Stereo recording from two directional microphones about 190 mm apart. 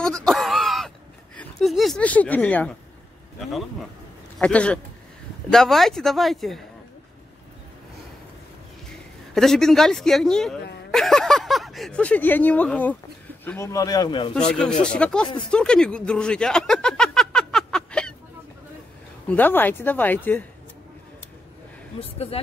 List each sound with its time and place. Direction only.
0.0 s wail: 5° left (ahead or behind)
1.6 s speech: centre (ahead or behind)
4.4 s speech: 5° left (ahead or behind)
9.3 s speech: centre (ahead or behind); by 14.3 s 25° left (ahead or behind)
14.5 s speech: 5° left (ahead or behind)
15.5 s a sound: 5° left (ahead or behind)
19.2 s speech: 10° left (ahead or behind)